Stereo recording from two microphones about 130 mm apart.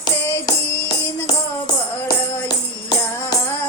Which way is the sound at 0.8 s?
35° left (ahead or behind).